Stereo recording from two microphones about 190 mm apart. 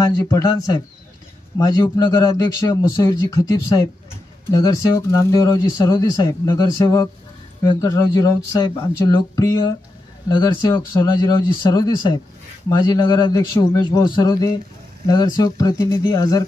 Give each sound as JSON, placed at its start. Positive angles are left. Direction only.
{"t": 0.0, "sound": "a man's voice", "side_deg": 15}